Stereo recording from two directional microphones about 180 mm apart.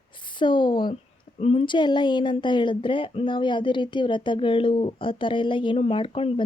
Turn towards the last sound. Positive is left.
turn(degrees=30)  # may be behind; listen again after turning